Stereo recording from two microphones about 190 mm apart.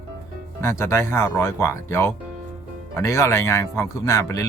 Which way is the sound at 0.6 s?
15° left (ahead or behind).